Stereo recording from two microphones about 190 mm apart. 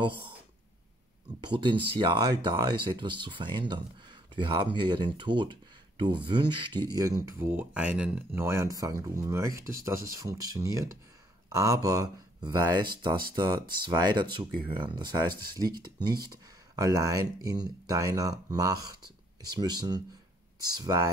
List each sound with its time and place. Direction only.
1.4 s speech: 25° right (ahead or behind)